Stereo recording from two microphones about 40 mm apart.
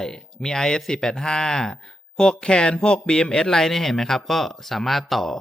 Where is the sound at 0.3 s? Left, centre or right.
Centre.